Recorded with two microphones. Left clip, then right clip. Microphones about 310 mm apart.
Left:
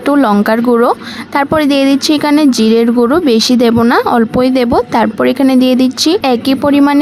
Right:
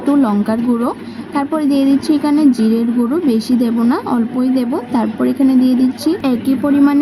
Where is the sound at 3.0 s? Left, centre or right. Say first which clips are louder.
Left 7 dB; left.